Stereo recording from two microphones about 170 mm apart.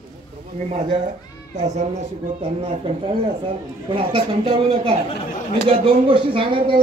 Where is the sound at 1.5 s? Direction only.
45° right (ahead or behind).